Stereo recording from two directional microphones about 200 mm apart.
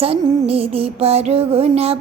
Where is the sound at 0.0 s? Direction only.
30° right (ahead or behind).